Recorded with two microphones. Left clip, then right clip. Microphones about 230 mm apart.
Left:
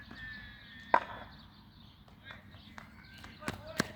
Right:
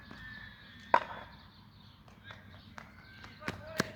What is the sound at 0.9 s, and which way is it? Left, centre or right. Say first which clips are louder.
Chop: right 1 dB; centre.